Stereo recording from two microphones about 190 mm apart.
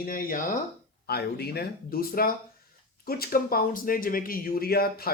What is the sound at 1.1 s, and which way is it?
Speech, 55° left (ahead or behind).